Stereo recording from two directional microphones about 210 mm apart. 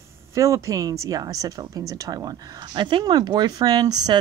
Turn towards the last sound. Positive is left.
turn(degrees=-20)  # may be behind; listen again after turning